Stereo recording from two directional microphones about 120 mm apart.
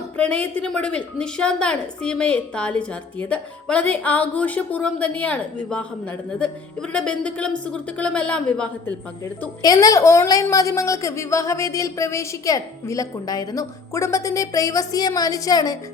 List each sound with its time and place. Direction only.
0.2 s a woman's voice: 10° left (ahead or behind)
9.6 s a woman's voice: 30° left (ahead or behind)